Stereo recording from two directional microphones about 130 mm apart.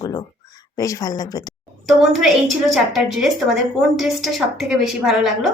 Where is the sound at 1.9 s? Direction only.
Centre (ahead or behind).